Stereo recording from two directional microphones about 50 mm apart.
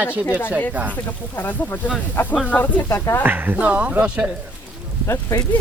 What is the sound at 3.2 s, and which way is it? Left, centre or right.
Speech, right.